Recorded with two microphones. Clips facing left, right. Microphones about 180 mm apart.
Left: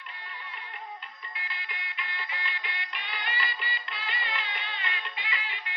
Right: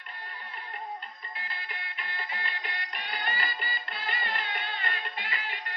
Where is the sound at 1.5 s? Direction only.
45° right (ahead or behind).